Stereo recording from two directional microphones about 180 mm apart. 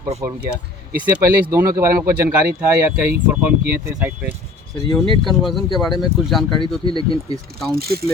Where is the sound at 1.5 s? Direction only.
15° right (ahead or behind); by 6.7 s centre (ahead or behind).